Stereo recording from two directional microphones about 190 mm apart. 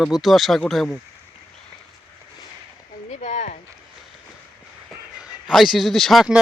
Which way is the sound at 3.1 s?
40° left (ahead or behind).